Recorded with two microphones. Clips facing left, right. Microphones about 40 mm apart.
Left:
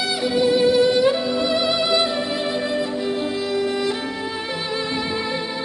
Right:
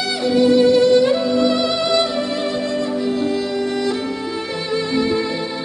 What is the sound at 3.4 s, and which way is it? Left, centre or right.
Music, centre.